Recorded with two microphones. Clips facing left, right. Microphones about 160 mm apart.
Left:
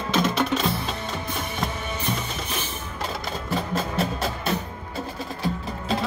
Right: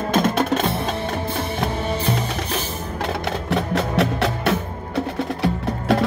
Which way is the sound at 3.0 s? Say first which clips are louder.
Right 6 dB; 70° right (ahead or behind).